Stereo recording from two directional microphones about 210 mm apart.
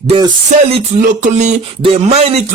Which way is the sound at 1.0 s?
35° right (ahead or behind).